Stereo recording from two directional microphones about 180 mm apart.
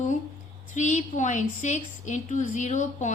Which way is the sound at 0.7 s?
40° left (ahead or behind).